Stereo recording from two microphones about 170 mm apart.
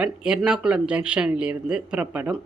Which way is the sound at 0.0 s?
5° right (ahead or behind).